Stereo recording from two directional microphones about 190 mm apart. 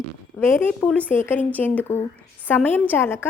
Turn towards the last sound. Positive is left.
turn(degrees=10)  # may be behind; listen again after turning